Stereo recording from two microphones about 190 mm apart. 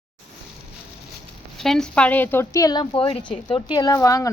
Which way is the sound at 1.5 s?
Centre (ahead or behind).